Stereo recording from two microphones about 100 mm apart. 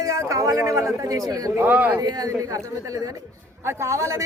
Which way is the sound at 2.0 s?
40° right (ahead or behind).